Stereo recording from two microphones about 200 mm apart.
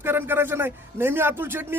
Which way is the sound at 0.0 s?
10° right (ahead or behind).